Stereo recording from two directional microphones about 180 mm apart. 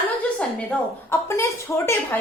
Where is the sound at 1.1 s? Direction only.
15° left (ahead or behind).